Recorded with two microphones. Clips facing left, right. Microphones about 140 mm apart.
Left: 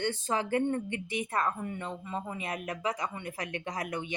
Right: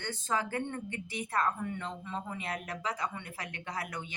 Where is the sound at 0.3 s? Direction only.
15° left (ahead or behind).